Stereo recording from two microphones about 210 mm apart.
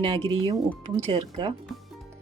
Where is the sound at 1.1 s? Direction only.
20° right (ahead or behind).